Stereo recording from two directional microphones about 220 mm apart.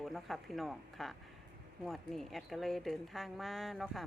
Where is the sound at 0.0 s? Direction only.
Centre (ahead or behind).